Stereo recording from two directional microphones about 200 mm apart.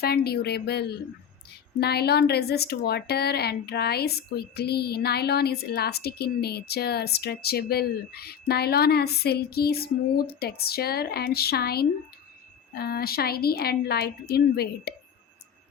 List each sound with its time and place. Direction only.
0.0 s speech: 50° left (ahead or behind)